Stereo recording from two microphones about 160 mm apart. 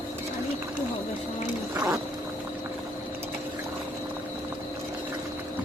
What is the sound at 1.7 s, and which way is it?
Boat, 20° right (ahead or behind).